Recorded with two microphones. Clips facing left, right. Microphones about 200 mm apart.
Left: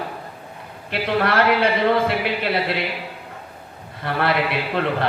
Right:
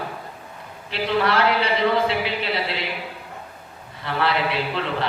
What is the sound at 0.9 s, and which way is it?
A man's voice, 55° left (ahead or behind).